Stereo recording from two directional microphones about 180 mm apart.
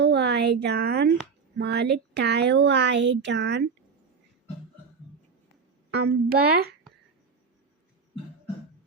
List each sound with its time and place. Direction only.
0.0 s a sound: 65° right (ahead or behind)
1.5 s a woman's voice: 65° right (ahead or behind)
5.9 s speech: 60° right (ahead or behind)